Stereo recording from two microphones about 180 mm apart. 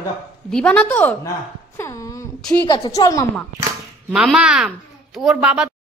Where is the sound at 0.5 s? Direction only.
5° left (ahead or behind).